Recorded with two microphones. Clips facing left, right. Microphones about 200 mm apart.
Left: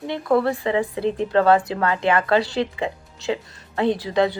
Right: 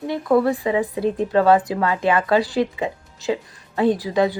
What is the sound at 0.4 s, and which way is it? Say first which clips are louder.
Speech: right 2 dB; 15° right (ahead or behind).